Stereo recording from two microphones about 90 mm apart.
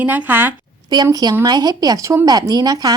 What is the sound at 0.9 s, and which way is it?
Speech, 50° right (ahead or behind).